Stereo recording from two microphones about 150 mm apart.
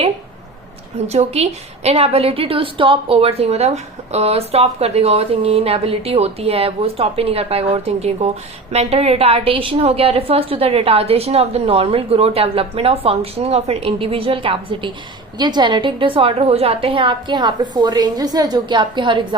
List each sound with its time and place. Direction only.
0.9 s a woman's voice: 45° right (ahead or behind)